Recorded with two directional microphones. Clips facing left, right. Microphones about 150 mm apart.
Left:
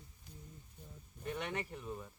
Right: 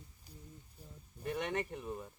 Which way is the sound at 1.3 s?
45° right (ahead or behind).